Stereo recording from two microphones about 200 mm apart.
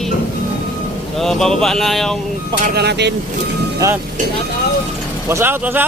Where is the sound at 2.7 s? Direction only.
55° right (ahead or behind).